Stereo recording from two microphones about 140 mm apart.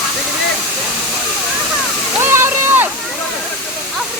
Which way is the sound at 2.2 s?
15° right (ahead or behind).